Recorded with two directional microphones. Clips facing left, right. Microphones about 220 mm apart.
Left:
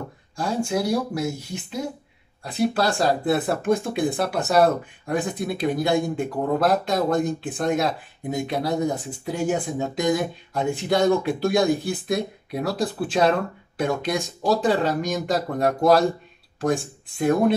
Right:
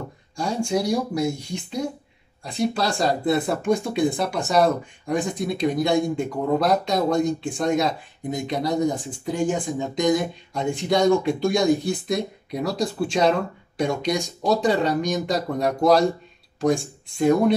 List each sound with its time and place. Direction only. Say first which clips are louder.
0.7 s speech: right 1 dB; 5° left (ahead or behind)